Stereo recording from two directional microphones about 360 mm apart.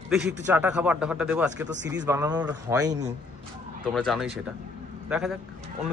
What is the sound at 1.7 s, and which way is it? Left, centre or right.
Speech, right.